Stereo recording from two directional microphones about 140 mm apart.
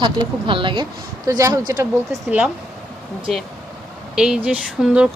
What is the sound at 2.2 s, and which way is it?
Speech, 5° right (ahead or behind).